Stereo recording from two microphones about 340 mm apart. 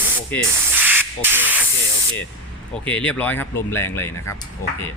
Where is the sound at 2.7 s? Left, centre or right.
Centre.